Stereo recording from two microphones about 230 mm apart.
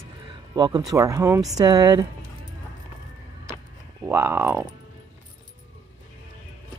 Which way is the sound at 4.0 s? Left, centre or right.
Centre.